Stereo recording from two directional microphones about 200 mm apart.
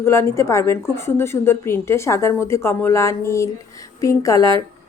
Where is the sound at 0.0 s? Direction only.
15° left (ahead or behind).